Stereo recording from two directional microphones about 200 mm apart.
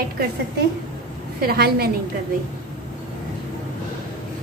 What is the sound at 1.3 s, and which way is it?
Speech, 50° right (ahead or behind).